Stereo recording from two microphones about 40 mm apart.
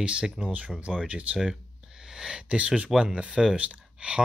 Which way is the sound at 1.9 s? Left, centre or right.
Centre.